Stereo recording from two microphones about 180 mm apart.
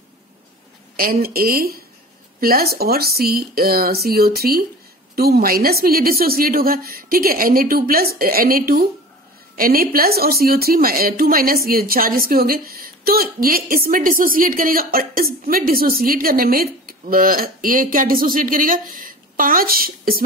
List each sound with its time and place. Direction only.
0.9 s a woman's voice: 55° right (ahead or behind)